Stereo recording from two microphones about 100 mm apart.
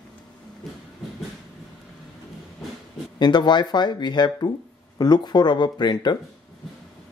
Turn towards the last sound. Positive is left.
turn(degrees=50)  # may be behind; listen again after turning